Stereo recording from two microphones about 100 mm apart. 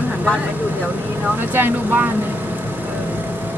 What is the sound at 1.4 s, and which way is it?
Speech, 20° right (ahead or behind).